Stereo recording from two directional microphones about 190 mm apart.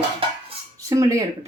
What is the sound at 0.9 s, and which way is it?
Speech, 15° right (ahead or behind).